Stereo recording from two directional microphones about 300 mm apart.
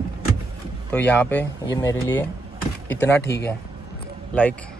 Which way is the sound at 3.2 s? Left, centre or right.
Left.